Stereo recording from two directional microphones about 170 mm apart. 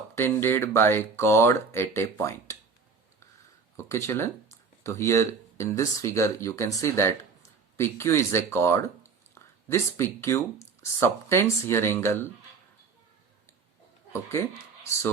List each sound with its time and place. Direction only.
0.2 s speech: 15° left (ahead or behind)
3.8 s speech: 15° left (ahead or behind)
14.1 s speech: 15° left (ahead or behind)